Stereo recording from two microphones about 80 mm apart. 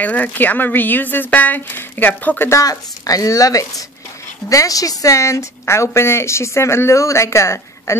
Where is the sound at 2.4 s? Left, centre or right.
Left.